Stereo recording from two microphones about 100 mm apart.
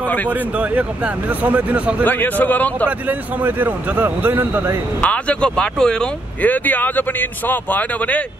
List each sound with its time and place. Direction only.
0.3 s speech: 15° right (ahead or behind)
2.0 s speech: 15° left (ahead or behind)
3.1 s a man's voice: 20° right (ahead or behind)
5.0 s speech: 10° left (ahead or behind)